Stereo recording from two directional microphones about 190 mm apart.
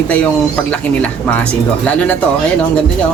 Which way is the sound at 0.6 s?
5° left (ahead or behind).